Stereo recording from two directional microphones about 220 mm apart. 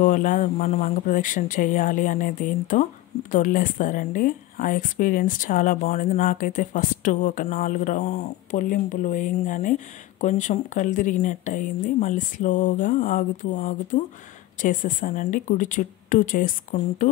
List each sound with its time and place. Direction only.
0.0 s speech: 35° left (ahead or behind)